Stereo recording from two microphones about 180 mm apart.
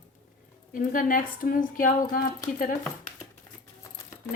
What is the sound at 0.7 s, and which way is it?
A woman's voice, 50° left (ahead or behind).